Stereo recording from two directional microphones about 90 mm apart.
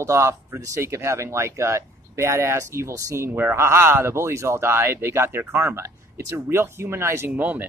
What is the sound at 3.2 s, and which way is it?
Speech, 25° right (ahead or behind).